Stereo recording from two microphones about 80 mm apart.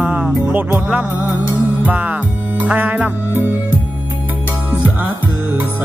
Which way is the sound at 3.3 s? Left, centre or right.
Right.